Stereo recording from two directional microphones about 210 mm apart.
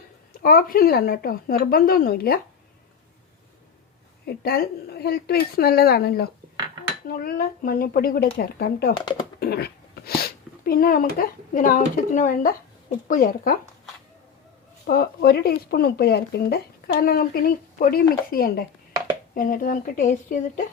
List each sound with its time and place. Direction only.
0.4 s speech: 45° left (ahead or behind)
4.3 s a woman's voice: 45° left (ahead or behind)
14.8 s a woman's voice: 45° left (ahead or behind)